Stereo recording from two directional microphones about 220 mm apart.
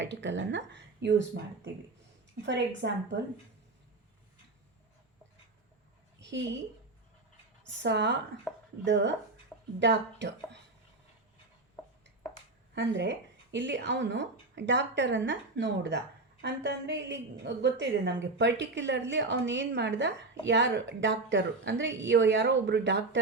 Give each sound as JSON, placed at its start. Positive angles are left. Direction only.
{"t": 0.0, "sound": "speech", "side_deg": -55}
{"t": 2.8, "sound": "speech", "side_deg": -50}
{"t": 6.1, "sound": "a woman's voice", "side_deg": -55}
{"t": 7.8, "sound": "speech", "side_deg": -50}
{"t": 8.5, "sound": "speech", "side_deg": 5}
{"t": 8.8, "sound": "speech", "side_deg": -55}
{"t": 9.5, "sound": "a sound", "side_deg": 5}
{"t": 9.8, "sound": "speech", "side_deg": -55}
{"t": 12.7, "sound": "a woman's voice", "side_deg": -55}